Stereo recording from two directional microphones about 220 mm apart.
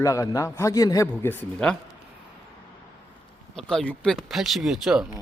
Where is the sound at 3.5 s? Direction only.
5° left (ahead or behind).